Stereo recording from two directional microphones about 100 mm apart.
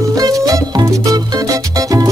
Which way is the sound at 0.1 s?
35° right (ahead or behind).